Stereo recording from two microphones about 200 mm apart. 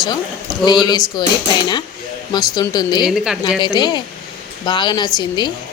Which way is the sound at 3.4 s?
20° left (ahead or behind).